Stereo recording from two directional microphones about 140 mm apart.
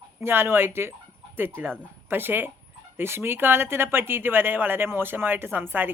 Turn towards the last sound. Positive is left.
turn(degrees=-15)  # may be behind; listen again after turning